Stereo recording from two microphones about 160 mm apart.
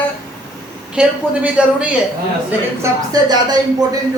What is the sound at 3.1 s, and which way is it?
Speech, 25° right (ahead or behind).